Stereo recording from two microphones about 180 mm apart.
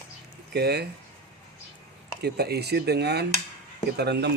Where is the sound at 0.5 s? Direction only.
65° right (ahead or behind).